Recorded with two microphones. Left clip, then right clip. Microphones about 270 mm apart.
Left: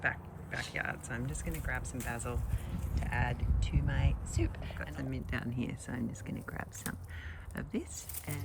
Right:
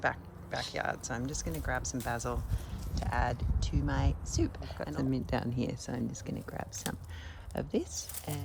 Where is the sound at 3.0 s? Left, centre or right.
Right.